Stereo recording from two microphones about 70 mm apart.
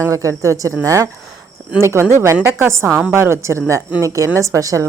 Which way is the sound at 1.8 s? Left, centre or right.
Right.